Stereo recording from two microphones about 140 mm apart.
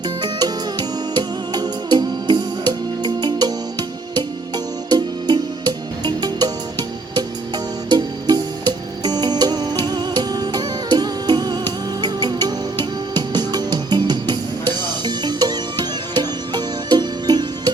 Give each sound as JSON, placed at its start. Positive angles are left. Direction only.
{"t": 0.2, "sound": "music", "side_deg": -30}